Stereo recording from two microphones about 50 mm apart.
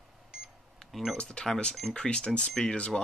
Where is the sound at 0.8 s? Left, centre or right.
Centre.